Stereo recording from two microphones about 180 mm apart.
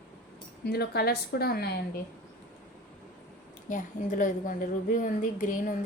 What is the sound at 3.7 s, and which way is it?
A woman's voice, 45° left (ahead or behind).